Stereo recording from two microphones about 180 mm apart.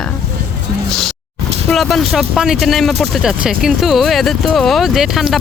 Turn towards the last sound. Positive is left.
turn(degrees=0)  # may be behind; listen again after turning